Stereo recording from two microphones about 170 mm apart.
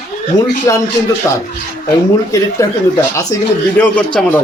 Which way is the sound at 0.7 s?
20° left (ahead or behind).